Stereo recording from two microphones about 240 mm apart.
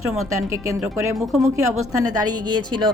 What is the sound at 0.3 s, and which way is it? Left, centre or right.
Speech, centre.